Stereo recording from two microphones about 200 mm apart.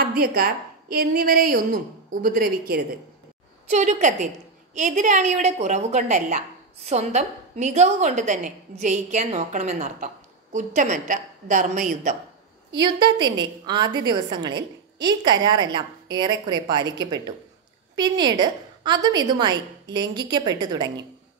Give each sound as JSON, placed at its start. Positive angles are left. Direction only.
{"t": 0.0, "sound": "a woman's voice", "side_deg": -50}
{"t": 3.6, "sound": "a woman's voice", "side_deg": -35}
{"t": 12.7, "sound": "a woman's voice", "side_deg": -20}